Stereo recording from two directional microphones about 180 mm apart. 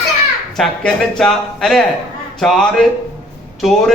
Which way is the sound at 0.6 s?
5° left (ahead or behind).